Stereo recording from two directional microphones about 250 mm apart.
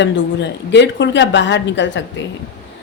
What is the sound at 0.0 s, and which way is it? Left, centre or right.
Speech, left.